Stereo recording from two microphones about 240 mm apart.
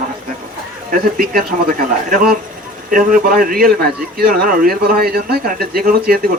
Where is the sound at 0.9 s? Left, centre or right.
Right.